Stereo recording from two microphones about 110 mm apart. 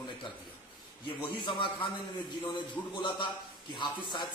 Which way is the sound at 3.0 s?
45° left (ahead or behind).